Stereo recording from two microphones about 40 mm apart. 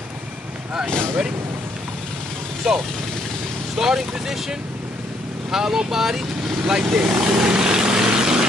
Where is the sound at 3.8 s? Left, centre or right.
Centre.